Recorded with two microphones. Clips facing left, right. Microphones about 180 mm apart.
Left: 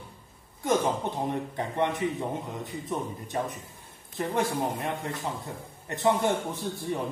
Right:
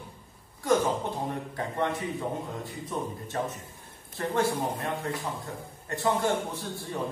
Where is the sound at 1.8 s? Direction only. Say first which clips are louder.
Left 3 dB; 20° left (ahead or behind).